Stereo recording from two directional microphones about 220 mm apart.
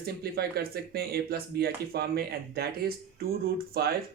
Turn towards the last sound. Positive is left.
turn(degrees=-45)  # may be behind; listen again after turning